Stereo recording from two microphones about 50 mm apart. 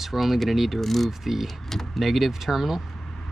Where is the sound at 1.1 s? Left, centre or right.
Centre.